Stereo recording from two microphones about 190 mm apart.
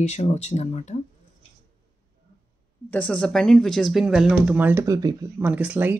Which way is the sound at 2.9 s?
5° left (ahead or behind).